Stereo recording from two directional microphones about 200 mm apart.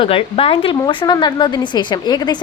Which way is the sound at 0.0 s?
25° left (ahead or behind).